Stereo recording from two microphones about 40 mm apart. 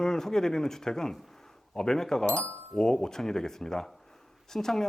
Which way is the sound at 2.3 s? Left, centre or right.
Left.